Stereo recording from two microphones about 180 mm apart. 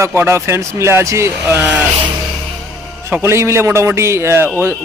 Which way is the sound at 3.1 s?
15° right (ahead or behind).